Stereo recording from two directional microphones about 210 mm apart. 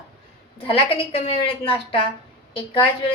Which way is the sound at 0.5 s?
25° left (ahead or behind).